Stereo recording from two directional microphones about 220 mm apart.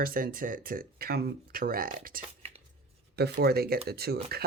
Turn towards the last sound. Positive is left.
turn(degrees=-45)  # may be behind; listen again after turning